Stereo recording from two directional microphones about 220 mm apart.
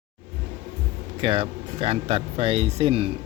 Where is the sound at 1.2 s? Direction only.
25° right (ahead or behind).